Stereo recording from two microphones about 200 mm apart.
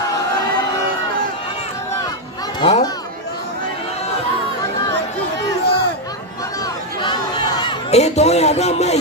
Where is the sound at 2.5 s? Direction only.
30° left (ahead or behind).